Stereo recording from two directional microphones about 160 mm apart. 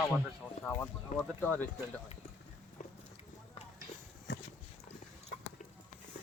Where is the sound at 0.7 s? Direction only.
5° left (ahead or behind).